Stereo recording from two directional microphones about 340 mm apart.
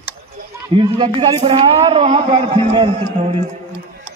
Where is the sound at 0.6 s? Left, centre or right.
Centre.